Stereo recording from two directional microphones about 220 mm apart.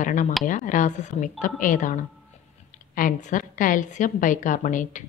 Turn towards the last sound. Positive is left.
turn(degrees=35)  # may be behind; listen again after turning